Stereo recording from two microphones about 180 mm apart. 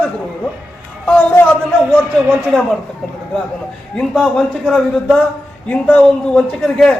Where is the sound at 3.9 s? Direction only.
5° left (ahead or behind).